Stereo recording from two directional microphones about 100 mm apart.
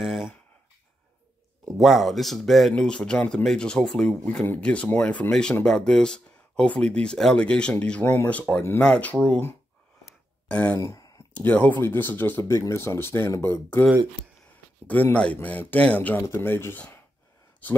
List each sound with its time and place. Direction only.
0.0 s speech: centre (ahead or behind)
1.8 s speech: centre (ahead or behind)
8.0 s speech: 20° left (ahead or behind)
10.8 s a sound: 30° left (ahead or behind)
11.4 s speech: 15° left (ahead or behind)
14.9 s speech: 15° left (ahead or behind)